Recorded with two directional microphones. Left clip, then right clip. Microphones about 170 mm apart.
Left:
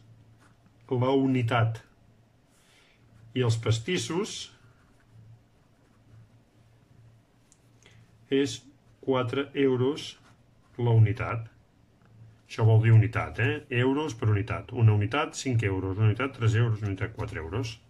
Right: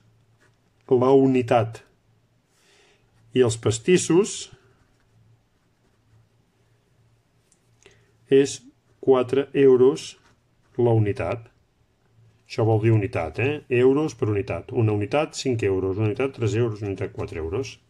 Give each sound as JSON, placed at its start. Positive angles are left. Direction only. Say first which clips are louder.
{"t": 0.8, "sound": "speech", "louder": "right 9 dB", "side_deg": -40}
{"t": 3.3, "sound": "speech", "louder": "right 9 dB", "side_deg": -40}
{"t": 7.8, "sound": "speech", "louder": "right 5 dB", "side_deg": -35}
{"t": 12.4, "sound": "speech", "louder": "right 7 dB", "side_deg": -25}